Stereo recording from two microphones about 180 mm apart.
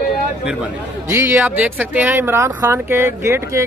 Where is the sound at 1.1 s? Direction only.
10° right (ahead or behind).